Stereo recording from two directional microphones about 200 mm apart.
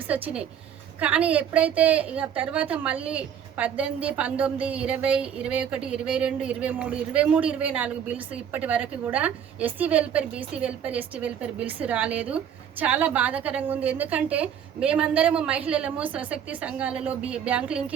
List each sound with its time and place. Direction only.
0.9 s a woman's voice: 5° right (ahead or behind)